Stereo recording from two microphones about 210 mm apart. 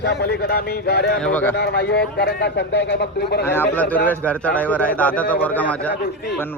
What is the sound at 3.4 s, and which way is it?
A man's voice, 10° left (ahead or behind).